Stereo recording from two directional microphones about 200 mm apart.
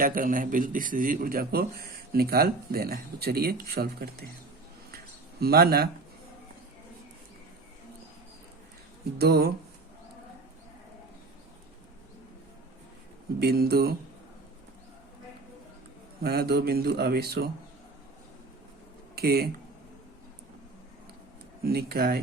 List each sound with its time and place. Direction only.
0.0 s speech: 45° right (ahead or behind)
5.4 s speech: 50° right (ahead or behind)
9.1 s speech: 50° right (ahead or behind)
13.4 s speech: 50° right (ahead or behind)
16.2 s speech: 50° right (ahead or behind)
19.1 s speech: 50° right (ahead or behind)
21.6 s speech: 50° right (ahead or behind)